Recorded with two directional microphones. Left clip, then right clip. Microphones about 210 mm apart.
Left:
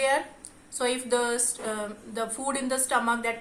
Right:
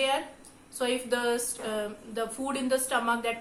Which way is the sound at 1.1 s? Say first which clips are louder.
Left 2 dB; 35° left (ahead or behind).